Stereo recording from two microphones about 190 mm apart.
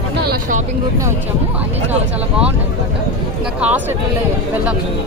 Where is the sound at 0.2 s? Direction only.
55° right (ahead or behind).